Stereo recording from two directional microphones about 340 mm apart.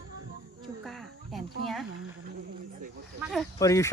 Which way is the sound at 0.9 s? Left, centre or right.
Centre.